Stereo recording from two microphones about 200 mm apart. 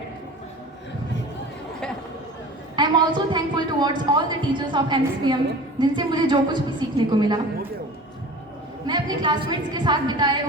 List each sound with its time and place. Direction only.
2.7 s a woman's voice: 25° right (ahead or behind)
8.9 s a woman's voice: 20° right (ahead or behind)